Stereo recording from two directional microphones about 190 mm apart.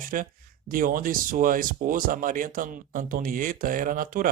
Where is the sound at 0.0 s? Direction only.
45° right (ahead or behind).